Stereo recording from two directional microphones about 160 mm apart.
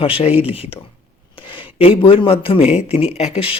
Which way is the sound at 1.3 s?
30° left (ahead or behind).